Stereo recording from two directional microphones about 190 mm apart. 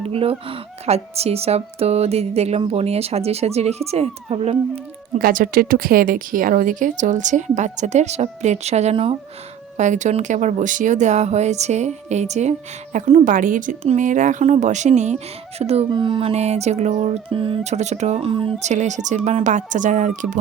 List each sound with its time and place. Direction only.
0.0 s speech: 30° right (ahead or behind)
5.2 s speech: 45° right (ahead or behind)